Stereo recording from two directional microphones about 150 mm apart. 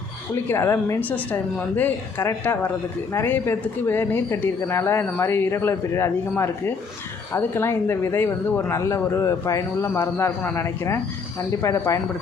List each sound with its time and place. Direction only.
0.4 s speech: 15° left (ahead or behind)